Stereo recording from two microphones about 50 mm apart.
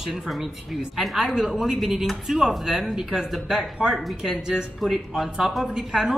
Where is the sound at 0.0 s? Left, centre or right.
Centre.